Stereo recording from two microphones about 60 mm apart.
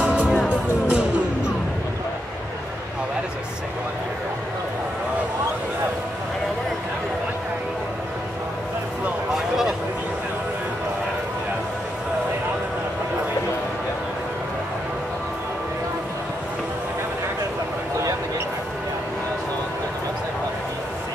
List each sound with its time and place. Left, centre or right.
0.0 s music: right